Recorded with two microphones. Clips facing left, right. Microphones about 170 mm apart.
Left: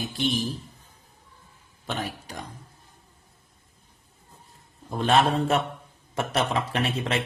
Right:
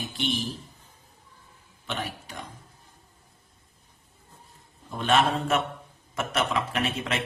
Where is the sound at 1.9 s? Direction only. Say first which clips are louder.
Left 2 dB; 40° left (ahead or behind).